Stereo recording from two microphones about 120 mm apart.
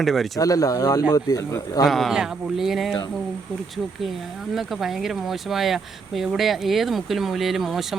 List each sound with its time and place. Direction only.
0.0 s speech: centre (ahead or behind)
0.3 s a man's voice: 30° left (ahead or behind)
1.9 s speech: centre (ahead or behind)
4.5 s speech: centre (ahead or behind)